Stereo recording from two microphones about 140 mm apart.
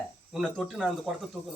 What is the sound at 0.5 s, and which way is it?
Speech, 5° left (ahead or behind).